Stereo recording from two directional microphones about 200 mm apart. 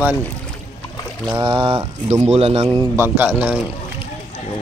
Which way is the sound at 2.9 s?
10° right (ahead or behind).